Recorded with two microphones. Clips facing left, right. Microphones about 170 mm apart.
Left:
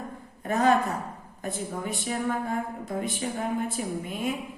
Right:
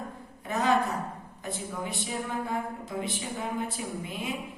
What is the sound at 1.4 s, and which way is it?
A woman's voice, 50° left (ahead or behind).